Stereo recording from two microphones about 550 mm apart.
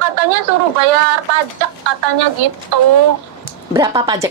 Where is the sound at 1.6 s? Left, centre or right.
Right.